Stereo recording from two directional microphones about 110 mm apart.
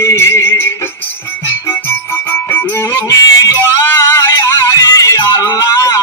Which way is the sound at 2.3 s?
15° left (ahead or behind).